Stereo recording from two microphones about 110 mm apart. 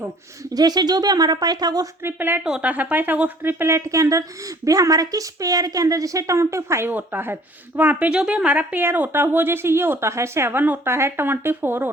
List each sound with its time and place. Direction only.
0.5 s speech: 40° right (ahead or behind)
2.0 s a woman's voice: 20° right (ahead or behind)